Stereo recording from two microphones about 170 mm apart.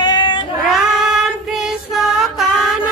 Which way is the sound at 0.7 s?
Centre (ahead or behind).